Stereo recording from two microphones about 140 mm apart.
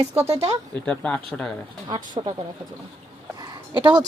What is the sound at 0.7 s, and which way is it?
Speech, 10° left (ahead or behind).